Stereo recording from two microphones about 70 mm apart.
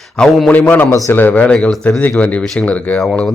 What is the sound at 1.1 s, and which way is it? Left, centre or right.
Speech, left.